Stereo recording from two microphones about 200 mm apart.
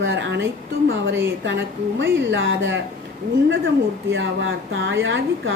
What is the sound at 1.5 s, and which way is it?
A woman's voice, 65° right (ahead or behind).